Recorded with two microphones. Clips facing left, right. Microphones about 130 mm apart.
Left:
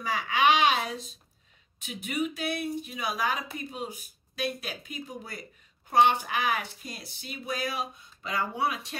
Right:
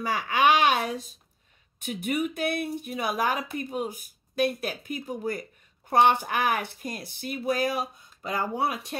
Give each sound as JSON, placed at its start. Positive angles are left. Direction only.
{"t": 0.1, "sound": "speech", "side_deg": -50}